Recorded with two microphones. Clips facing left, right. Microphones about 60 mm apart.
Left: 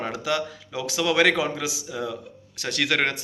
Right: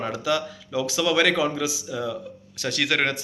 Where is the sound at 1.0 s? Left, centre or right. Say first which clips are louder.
Left 1 dB; left.